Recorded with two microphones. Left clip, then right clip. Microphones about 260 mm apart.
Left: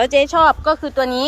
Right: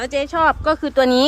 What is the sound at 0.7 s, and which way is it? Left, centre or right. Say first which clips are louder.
Speech: right 2 dB; centre.